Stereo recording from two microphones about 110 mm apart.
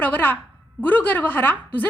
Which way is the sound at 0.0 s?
15° left (ahead or behind).